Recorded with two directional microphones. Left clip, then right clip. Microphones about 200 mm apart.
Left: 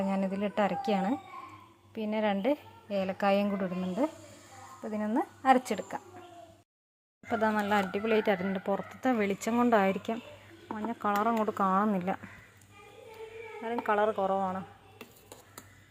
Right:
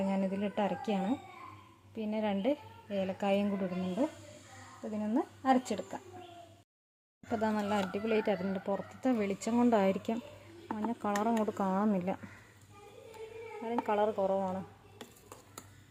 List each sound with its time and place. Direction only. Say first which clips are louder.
0.0 s a woman's voice: left 2 dB; centre (ahead or behind)
7.3 s a woman's voice: left 5 dB; centre (ahead or behind)
11.1 s a woman's voice: left 4 dB; centre (ahead or behind)
13.7 s a woman's voice: left 3 dB; 5° right (ahead or behind)